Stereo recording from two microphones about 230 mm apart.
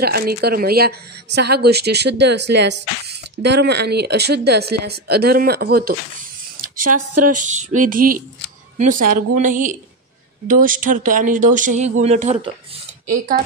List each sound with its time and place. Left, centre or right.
0.0 s speech: right
7.2 s speech: right